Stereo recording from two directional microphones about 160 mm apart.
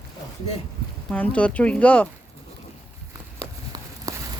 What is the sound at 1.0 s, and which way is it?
Speech, 10° left (ahead or behind).